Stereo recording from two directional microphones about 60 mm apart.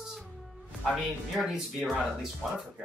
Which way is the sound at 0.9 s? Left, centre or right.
Centre.